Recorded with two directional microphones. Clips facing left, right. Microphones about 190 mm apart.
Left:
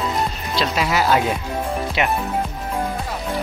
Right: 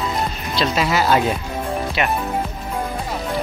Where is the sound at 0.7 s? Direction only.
10° left (ahead or behind).